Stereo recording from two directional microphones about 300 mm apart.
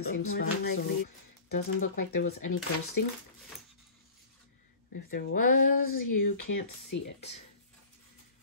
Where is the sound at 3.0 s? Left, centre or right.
Left.